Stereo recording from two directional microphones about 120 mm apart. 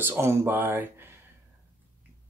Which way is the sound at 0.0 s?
20° right (ahead or behind).